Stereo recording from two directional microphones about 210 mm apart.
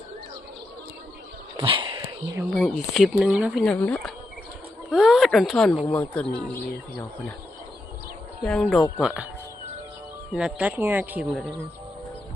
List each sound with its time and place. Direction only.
1.5 s a sound: 25° right (ahead or behind)
2.0 s a sound: 15° right (ahead or behind)
2.5 s speech: 5° left (ahead or behind)
3.6 s speech: 5° left (ahead or behind)
8.4 s speech: 5° left (ahead or behind)
10.3 s speech: 5° right (ahead or behind)